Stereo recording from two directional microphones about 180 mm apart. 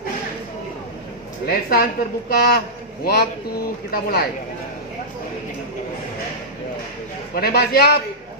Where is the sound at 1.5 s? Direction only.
55° left (ahead or behind).